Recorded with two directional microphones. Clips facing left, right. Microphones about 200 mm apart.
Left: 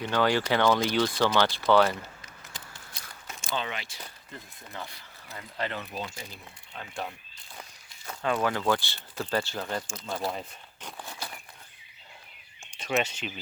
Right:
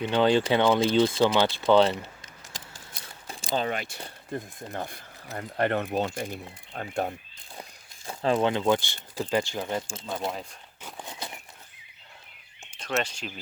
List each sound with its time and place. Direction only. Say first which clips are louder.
0.0 s speech: right 4 dB; 25° right (ahead or behind)
3.0 s a sound: right 4 dB; 25° right (ahead or behind)
3.5 s speech: right 6 dB; 45° right (ahead or behind)
8.0 s speech: right 4 dB; 30° right (ahead or behind)
10.9 s a sound: right 3 dB; 20° right (ahead or behind)
12.8 s speech: left 1 dB; 5° left (ahead or behind)